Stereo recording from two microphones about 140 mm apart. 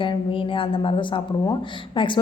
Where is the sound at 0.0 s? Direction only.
40° left (ahead or behind).